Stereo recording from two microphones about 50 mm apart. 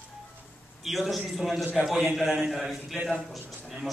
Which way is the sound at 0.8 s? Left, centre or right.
Centre.